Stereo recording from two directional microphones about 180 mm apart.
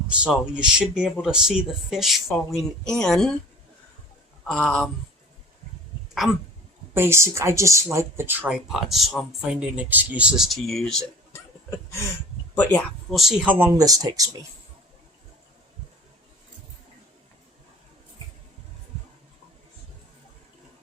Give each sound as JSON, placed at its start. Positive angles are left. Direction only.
{"t": 0.1, "sound": "speech", "side_deg": -5}
{"t": 4.4, "sound": "speech", "side_deg": 0}
{"t": 6.9, "sound": "speech", "side_deg": -15}
{"t": 12.5, "sound": "speech", "side_deg": 5}
{"t": 13.7, "sound": "speech", "side_deg": -20}